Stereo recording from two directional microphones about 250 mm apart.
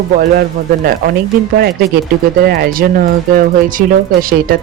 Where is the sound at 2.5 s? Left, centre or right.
Right.